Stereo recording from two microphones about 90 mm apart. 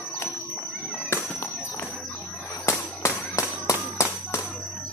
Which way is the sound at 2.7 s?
35° left (ahead or behind).